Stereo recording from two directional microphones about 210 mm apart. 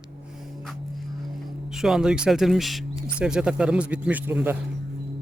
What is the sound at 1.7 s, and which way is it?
Speech, centre (ahead or behind).